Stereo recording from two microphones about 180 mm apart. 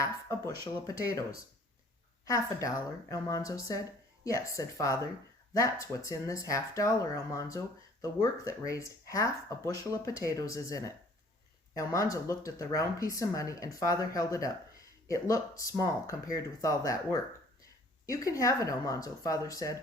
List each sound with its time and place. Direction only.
0.0 s speech: 15° left (ahead or behind)